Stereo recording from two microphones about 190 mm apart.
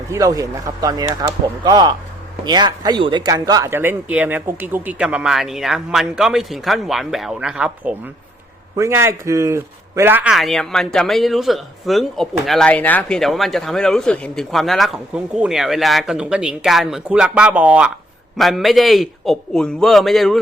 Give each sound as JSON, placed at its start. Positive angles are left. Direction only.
{"t": 0.1, "sound": "a man's voice", "side_deg": -20}
{"t": 8.7, "sound": "a man's voice", "side_deg": -15}